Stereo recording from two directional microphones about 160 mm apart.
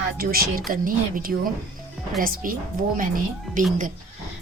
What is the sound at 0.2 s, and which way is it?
Speech, 70° right (ahead or behind).